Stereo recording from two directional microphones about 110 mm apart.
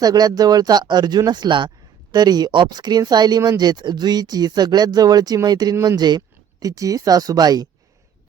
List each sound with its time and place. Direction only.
0.0 s speech: 35° right (ahead or behind)